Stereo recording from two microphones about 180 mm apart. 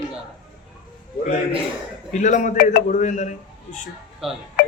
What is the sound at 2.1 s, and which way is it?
A man's voice, 45° left (ahead or behind).